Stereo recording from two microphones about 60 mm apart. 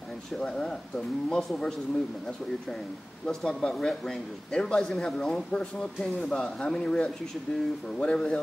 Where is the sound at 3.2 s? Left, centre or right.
Centre.